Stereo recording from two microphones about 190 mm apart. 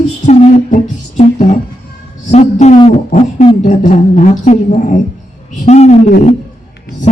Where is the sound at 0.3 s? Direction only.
35° left (ahead or behind).